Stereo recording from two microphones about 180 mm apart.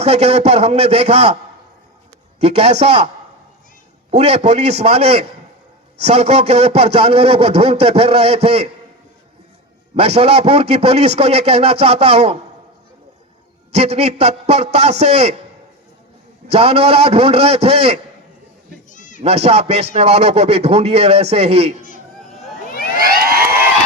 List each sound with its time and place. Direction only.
0.0 s a man's voice: 35° right (ahead or behind)
2.4 s a man's voice: 35° right (ahead or behind)
4.1 s a man's voice: 35° right (ahead or behind)
9.9 s a man's voice: 35° right (ahead or behind)
13.7 s a man's voice: 35° right (ahead or behind)
16.5 s a man's voice: 35° right (ahead or behind)
18.9 s bleat: 45° left (ahead or behind)
19.2 s a man's voice: 35° right (ahead or behind)
23.0 s a sound: 55° right (ahead or behind)